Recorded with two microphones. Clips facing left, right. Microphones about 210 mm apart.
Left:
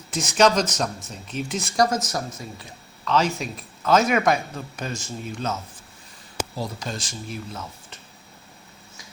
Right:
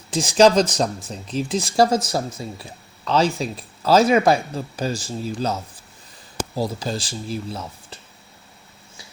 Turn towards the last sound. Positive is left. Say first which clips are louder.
# right 4 dB
turn(degrees=-35)  # may be behind; listen again after turning